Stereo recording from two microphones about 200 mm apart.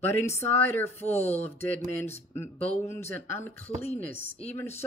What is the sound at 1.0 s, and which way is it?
Speech, 30° left (ahead or behind).